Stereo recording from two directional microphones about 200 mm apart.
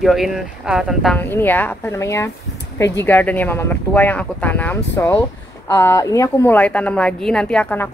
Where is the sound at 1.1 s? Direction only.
10° left (ahead or behind).